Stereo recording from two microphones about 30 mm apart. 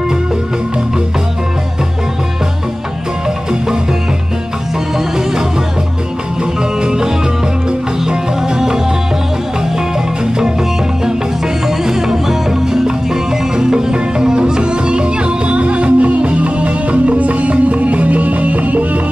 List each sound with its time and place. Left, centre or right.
4.9 s music: centre
6.8 s music: right
8.1 s music: right
11.6 s music: centre; by 18.9 s right